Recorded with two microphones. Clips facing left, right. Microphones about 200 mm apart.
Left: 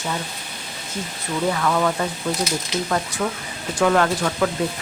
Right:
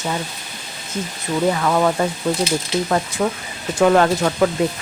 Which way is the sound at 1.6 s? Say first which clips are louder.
Right 3 dB; 30° right (ahead or behind).